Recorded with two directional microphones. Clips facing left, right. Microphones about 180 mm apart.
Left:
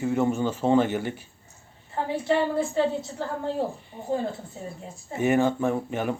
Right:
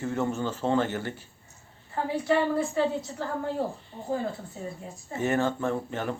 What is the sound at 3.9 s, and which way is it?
Speech, 10° left (ahead or behind).